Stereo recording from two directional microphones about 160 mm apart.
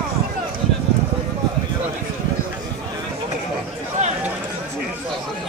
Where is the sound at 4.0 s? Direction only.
45° right (ahead or behind).